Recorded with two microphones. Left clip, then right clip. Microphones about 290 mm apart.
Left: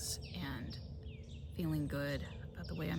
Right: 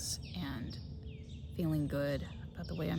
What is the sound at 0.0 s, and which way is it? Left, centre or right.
Bird, centre.